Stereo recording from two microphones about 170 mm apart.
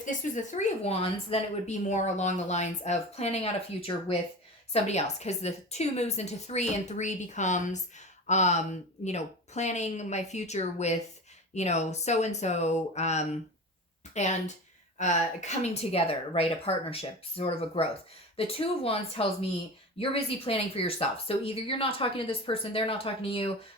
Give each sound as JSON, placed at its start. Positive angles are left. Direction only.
{"t": 0.0, "sound": "a woman's voice", "side_deg": 50}